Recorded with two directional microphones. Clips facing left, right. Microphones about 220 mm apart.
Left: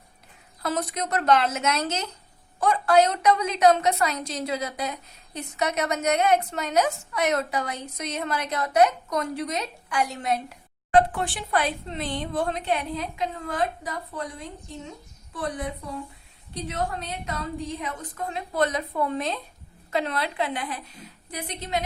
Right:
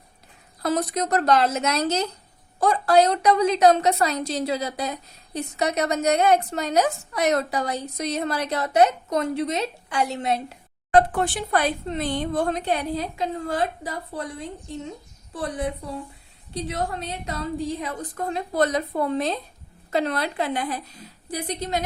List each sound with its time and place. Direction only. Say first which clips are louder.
0.6 s a woman's voice: right 4 dB; 40° right (ahead or behind)
11.1 s a woman's voice: right 4 dB; 45° right (ahead or behind)
15.3 s a woman's voice: right 3 dB; 30° right (ahead or behind)